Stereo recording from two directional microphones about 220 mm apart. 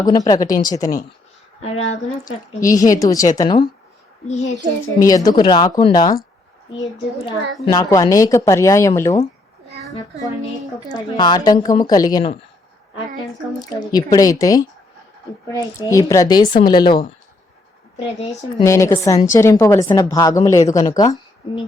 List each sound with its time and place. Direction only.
0.3 s a woman's voice: 15° left (ahead or behind)
1.6 s a woman's voice: 30° left (ahead or behind)
2.2 s a woman's voice: 15° left (ahead or behind)
4.3 s a child's voice: 30° left (ahead or behind)
4.9 s a woman's voice: 15° left (ahead or behind)
10.8 s a woman's voice: 15° left (ahead or behind)
13.6 s a woman's voice: 15° left (ahead or behind)
18.3 s a woman's voice: 15° left (ahead or behind)